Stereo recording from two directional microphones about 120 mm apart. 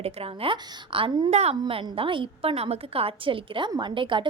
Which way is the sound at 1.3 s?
65° right (ahead or behind).